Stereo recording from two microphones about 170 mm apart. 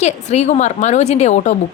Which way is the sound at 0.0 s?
40° left (ahead or behind).